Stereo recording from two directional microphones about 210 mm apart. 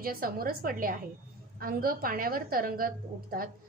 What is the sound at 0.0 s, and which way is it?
A woman's voice, 45° right (ahead or behind).